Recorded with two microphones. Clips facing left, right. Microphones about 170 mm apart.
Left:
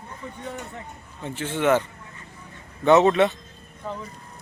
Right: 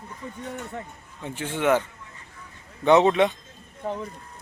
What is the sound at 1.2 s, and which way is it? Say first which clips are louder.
Speech: left 1 dB; 10° right (ahead or behind).